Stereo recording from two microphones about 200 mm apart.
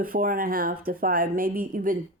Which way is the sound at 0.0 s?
45° right (ahead or behind).